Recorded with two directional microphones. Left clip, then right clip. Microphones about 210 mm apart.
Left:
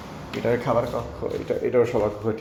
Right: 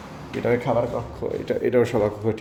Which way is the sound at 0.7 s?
20° right (ahead or behind).